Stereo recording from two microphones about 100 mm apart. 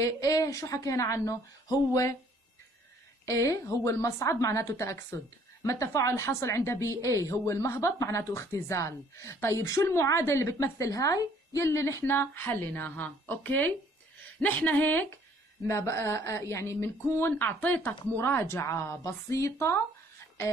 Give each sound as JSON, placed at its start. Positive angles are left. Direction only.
{"t": 0.0, "sound": "a woman's voice", "side_deg": 35}
{"t": 3.3, "sound": "a woman's voice", "side_deg": 35}